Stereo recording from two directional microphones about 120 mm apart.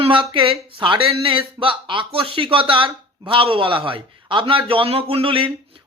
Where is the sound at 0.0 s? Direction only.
45° right (ahead or behind).